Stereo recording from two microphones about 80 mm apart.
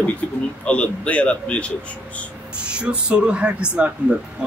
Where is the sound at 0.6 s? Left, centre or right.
Centre.